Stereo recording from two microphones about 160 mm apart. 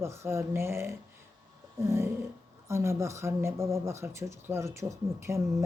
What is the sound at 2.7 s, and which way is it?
Speech, 15° right (ahead or behind).